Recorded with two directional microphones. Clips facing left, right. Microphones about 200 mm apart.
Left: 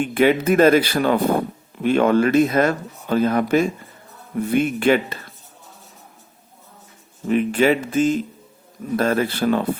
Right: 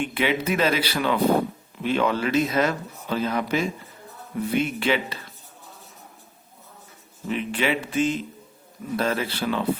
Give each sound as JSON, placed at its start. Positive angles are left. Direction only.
{"t": 0.0, "sound": "speech", "side_deg": 45}
{"t": 7.3, "sound": "speech", "side_deg": 45}